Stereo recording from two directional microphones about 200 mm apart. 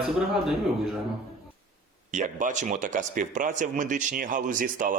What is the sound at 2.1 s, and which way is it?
Speech, 35° right (ahead or behind).